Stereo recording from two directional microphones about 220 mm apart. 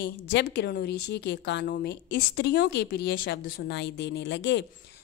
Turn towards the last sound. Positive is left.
turn(degrees=55)  # may be behind; listen again after turning